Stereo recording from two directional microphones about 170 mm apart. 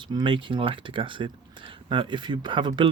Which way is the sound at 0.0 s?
25° right (ahead or behind).